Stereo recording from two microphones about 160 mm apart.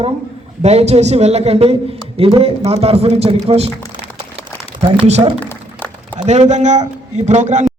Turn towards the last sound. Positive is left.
turn(degrees=-50)  # may be behind; listen again after turning